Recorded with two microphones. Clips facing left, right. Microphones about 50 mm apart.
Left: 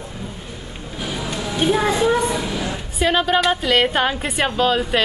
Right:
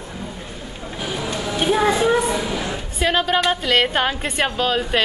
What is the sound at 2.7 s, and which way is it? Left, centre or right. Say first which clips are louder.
A woman's voice: left 2 dB; centre.